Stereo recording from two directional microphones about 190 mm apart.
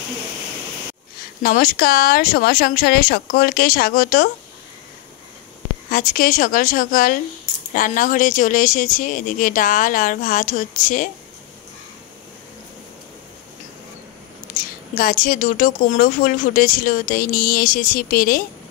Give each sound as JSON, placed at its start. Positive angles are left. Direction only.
{"t": 1.4, "sound": "speech", "side_deg": 45}
{"t": 5.9, "sound": "speech", "side_deg": 50}
{"t": 15.0, "sound": "speech", "side_deg": 45}